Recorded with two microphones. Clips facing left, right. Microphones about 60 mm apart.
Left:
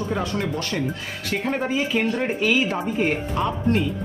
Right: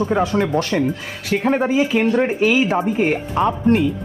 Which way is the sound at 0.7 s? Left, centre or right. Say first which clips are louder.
Right 6 dB; right.